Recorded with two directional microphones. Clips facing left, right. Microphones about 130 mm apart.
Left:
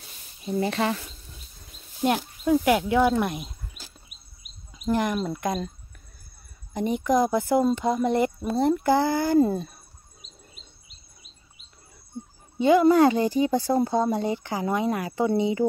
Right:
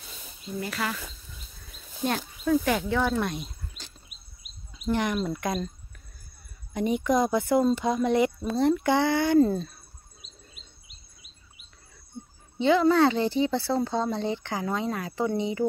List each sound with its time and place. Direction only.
0.6 s speech: 30° left (ahead or behind)
2.0 s speech: 15° left (ahead or behind)
6.7 s speech: centre (ahead or behind)
12.5 s speech: 10° left (ahead or behind)
13.3 s speech: 45° left (ahead or behind)
13.7 s speech: 15° left (ahead or behind)